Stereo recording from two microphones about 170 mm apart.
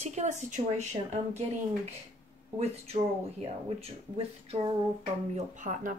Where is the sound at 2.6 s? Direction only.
35° right (ahead or behind).